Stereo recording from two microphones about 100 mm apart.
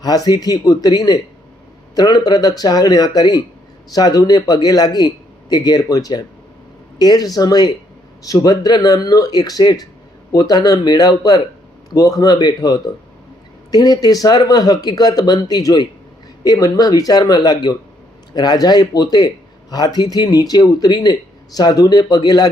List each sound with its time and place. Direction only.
0.0 s speech: 40° left (ahead or behind)